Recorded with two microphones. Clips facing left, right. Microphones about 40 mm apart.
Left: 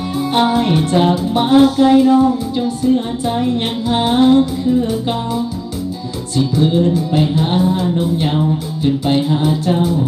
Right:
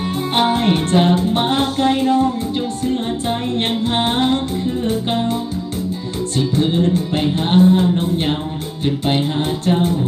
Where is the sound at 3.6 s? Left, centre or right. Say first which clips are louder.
Left 1 dB; right.